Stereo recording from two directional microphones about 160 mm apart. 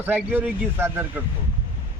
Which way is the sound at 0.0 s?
10° right (ahead or behind).